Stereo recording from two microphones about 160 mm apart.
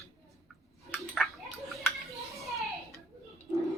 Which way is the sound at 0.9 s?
5° left (ahead or behind).